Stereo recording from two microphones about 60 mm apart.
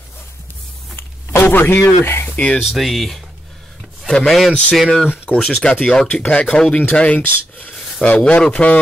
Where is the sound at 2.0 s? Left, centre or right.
Left.